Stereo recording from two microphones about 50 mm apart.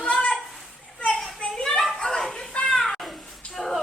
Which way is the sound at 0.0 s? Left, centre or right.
Left.